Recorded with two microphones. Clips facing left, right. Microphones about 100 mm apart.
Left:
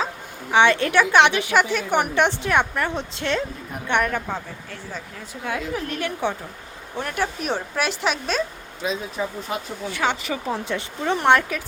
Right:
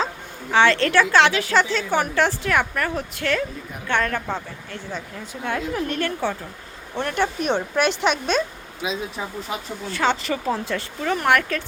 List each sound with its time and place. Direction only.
0.5 s a woman's voice: 15° left (ahead or behind)
4.3 s a woman's voice: centre (ahead or behind)
6.2 s a woman's voice: 20° left (ahead or behind)
6.9 s a woman's voice: 5° left (ahead or behind)
9.9 s a woman's voice: 10° left (ahead or behind)